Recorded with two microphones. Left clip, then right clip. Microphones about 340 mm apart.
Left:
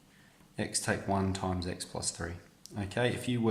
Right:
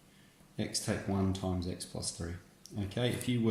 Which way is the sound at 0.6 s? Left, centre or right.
Left.